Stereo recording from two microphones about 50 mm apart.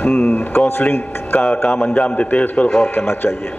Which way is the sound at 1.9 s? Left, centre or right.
Left.